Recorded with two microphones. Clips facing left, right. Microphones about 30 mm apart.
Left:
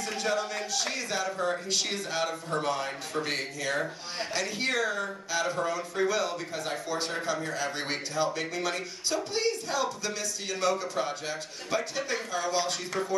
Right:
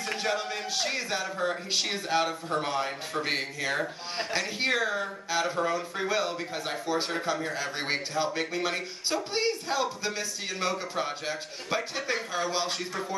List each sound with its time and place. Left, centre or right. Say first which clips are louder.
0.0 s a man's voice: even; right